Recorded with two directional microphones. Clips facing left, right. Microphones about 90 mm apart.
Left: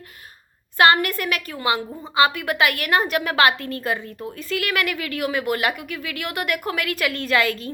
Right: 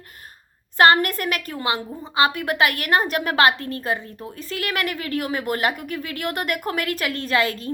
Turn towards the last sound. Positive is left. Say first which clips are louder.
# left 1 dB
turn(degrees=-30)  # may be behind; listen again after turning